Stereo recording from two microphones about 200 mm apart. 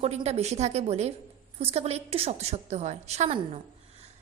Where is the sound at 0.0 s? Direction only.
30° right (ahead or behind).